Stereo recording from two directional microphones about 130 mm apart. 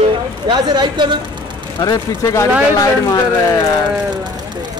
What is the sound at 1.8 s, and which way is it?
Speech, 25° left (ahead or behind).